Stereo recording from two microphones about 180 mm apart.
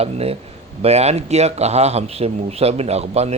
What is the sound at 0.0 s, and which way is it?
Speech, 35° right (ahead or behind).